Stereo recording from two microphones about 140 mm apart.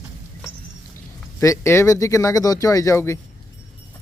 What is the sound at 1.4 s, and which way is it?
Speech, 20° left (ahead or behind).